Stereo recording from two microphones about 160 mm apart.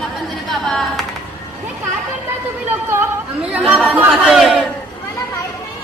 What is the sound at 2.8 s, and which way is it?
Speech, 10° right (ahead or behind).